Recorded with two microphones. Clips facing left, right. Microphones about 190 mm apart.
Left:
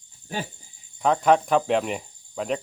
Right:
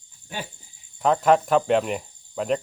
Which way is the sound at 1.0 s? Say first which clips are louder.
Right 1 dB; centre (ahead or behind).